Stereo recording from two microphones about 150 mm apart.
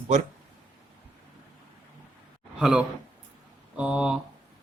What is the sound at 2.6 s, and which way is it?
A man's voice, 5° right (ahead or behind).